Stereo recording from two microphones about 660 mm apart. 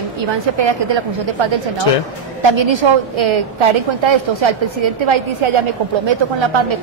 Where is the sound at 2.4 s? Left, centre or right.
Right.